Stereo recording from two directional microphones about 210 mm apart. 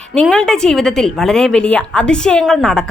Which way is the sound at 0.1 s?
5° left (ahead or behind).